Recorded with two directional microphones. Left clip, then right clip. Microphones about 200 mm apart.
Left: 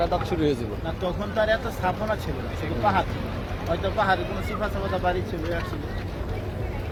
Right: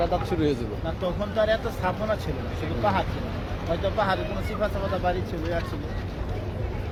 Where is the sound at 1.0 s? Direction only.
50° right (ahead or behind).